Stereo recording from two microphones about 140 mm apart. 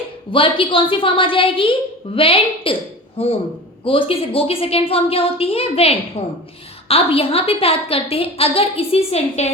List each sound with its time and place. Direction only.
0.3 s a woman's voice: 40° left (ahead or behind)